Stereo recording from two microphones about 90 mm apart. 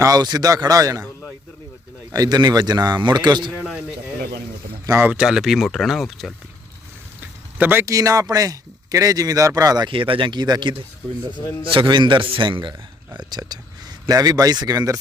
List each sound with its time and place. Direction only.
0.0 s speech: 45° right (ahead or behind)
2.1 s speech: 45° right (ahead or behind)
5.0 s speech: 10° right (ahead or behind)
7.2 s a sound: 20° right (ahead or behind)
7.9 s speech: 40° right (ahead or behind)
9.9 s speech: 80° right; by 12.2 s 60° right (ahead or behind)
12.3 s speech: 70° right (ahead or behind)
13.1 s speech: 50° right (ahead or behind)